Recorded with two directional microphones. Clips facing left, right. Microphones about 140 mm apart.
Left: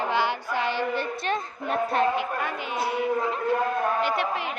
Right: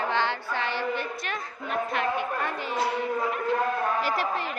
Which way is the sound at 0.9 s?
25° left (ahead or behind).